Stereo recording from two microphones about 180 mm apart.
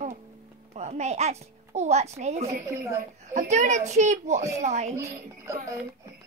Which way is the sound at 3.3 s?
40° right (ahead or behind).